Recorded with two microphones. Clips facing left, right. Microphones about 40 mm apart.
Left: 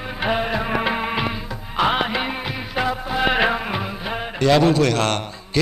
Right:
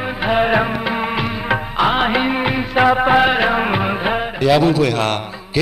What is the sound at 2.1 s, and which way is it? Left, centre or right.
Music of bollywood, centre.